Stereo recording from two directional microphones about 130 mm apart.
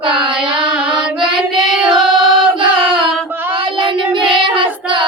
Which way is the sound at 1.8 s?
40° right (ahead or behind).